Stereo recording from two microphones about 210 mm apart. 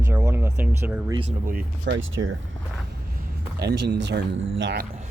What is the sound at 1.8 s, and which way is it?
Speech, 60° right (ahead or behind).